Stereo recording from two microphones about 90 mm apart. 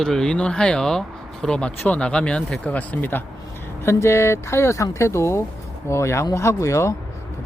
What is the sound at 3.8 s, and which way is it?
Speech, 30° left (ahead or behind).